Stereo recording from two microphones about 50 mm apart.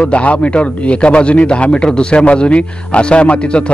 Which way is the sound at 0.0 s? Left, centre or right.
Left.